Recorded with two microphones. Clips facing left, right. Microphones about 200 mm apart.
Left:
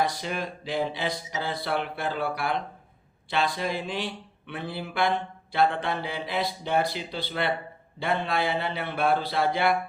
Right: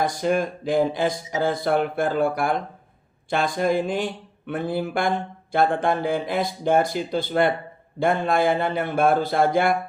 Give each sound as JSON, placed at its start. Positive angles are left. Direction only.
{"t": 0.0, "sound": "speech", "side_deg": -50}